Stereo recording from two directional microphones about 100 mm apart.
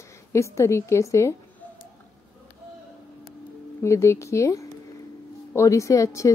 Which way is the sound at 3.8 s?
30° left (ahead or behind).